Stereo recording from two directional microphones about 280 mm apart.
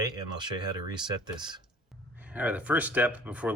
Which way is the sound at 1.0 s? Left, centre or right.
Centre.